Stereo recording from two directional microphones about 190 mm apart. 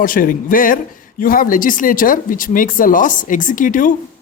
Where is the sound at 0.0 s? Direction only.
45° left (ahead or behind).